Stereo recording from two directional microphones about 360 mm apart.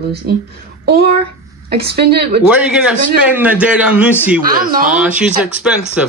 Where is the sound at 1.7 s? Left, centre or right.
Right.